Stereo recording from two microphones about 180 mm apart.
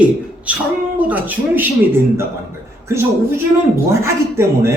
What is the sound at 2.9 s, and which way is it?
A man's voice, 15° right (ahead or behind).